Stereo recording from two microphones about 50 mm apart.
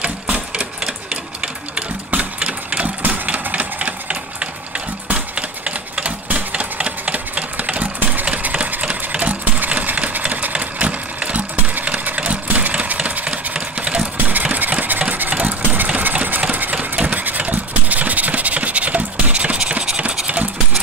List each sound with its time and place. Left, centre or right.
0.0 s sewing machine: right
1.4 s sewing machine: right
3.1 s engine: right
14.1 s engine: right